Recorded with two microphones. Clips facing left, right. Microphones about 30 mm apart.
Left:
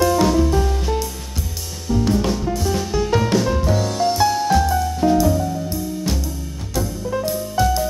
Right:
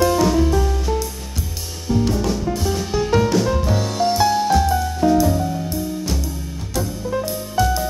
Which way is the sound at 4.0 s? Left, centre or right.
Centre.